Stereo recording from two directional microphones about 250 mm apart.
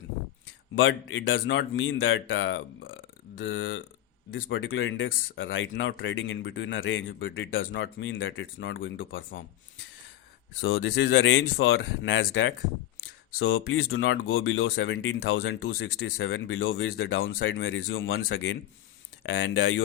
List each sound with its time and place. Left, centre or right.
0.8 s speech: left
10.6 s speech: left